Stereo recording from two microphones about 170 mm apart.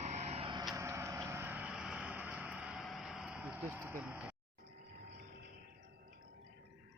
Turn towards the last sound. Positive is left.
turn(degrees=-75)  # may be behind; listen again after turning